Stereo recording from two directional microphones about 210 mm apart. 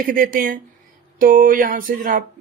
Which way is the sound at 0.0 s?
40° right (ahead or behind).